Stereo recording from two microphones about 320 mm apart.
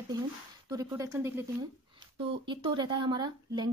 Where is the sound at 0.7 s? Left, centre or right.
Centre.